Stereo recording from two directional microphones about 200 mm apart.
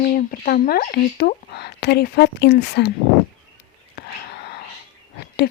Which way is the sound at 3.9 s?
55° left (ahead or behind).